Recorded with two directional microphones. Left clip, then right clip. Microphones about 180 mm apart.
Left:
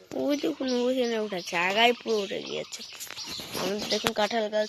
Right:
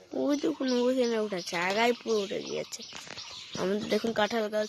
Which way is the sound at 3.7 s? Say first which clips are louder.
Even; 35° right (ahead or behind).